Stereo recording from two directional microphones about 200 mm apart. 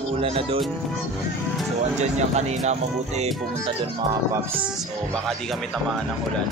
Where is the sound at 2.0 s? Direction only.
35° right (ahead or behind).